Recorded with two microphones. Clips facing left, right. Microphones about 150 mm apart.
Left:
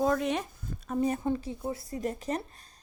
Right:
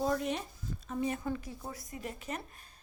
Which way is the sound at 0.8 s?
40° left (ahead or behind).